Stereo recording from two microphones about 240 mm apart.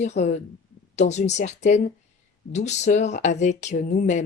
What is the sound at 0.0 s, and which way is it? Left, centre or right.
Speech, left.